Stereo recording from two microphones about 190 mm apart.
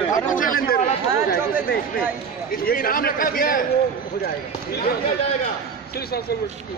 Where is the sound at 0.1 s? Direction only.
45° left (ahead or behind).